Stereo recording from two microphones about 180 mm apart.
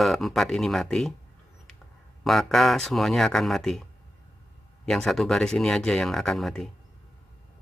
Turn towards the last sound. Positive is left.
turn(degrees=0)  # may be behind; listen again after turning